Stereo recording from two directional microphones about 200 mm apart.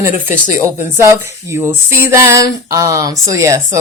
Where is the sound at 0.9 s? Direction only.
10° right (ahead or behind).